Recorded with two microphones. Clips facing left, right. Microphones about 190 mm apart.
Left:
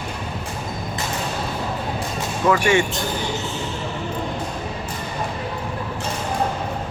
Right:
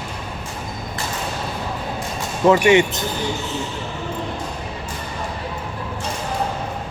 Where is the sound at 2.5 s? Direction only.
20° right (ahead or behind).